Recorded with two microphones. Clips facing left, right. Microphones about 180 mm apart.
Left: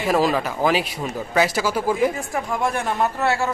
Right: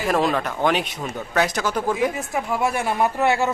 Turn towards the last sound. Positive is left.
turn(degrees=-15)  # may be behind; listen again after turning